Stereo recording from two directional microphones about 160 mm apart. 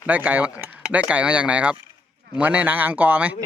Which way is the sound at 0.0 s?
10° right (ahead or behind).